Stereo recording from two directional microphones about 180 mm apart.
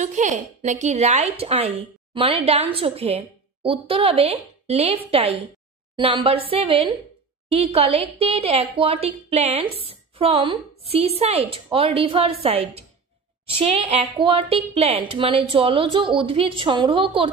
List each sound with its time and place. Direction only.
0.0 s a woman's voice: 40° right (ahead or behind)